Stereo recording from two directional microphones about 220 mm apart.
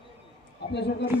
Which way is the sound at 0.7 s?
50° left (ahead or behind).